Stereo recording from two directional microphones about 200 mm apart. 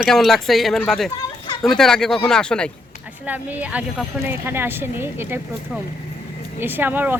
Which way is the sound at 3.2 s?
5° right (ahead or behind).